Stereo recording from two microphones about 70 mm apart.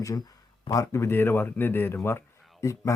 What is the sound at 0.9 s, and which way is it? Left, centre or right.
Speech, left.